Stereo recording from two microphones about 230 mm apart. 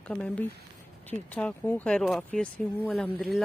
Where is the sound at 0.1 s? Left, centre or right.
Centre.